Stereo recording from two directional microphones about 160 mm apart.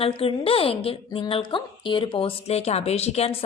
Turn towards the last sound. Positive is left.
turn(degrees=40)  # may be behind; listen again after turning